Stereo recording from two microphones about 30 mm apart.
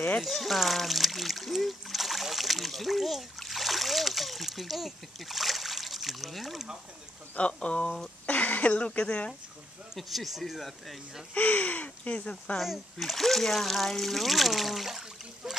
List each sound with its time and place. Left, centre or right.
0.2 s speech: centre
7.3 s speech: left
8.3 s speech: left
9.9 s speech: centre
11.3 s speech: left
13.0 s speech: centre